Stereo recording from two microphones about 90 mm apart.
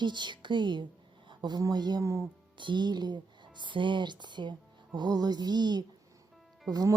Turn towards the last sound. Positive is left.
turn(degrees=-40)  # may be behind; listen again after turning